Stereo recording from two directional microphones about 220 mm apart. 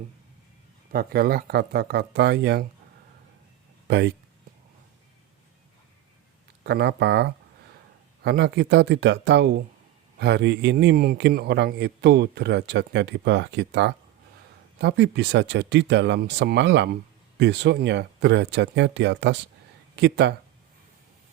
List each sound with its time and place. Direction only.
0.9 s a man's voice: 45° right (ahead or behind)
3.8 s speech: 55° right (ahead or behind)
6.7 s a man's voice: 50° right (ahead or behind)